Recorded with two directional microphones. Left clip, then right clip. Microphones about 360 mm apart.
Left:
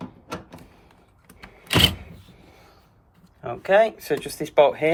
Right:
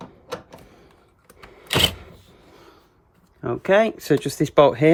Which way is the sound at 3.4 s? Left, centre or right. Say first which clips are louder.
Even; centre.